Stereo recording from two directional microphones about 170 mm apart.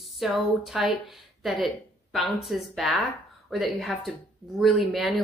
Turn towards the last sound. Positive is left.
turn(degrees=0)  # may be behind; listen again after turning